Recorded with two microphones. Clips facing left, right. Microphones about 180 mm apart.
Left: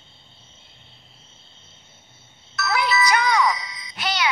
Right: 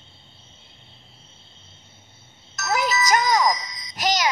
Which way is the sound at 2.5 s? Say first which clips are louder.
Left 1 dB; 45° right (ahead or behind).